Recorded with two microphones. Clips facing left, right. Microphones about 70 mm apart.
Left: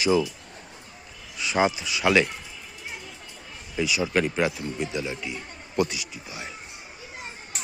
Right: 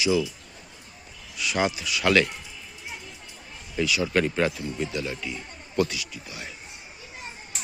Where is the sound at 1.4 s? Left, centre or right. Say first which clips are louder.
Left 2 dB; left.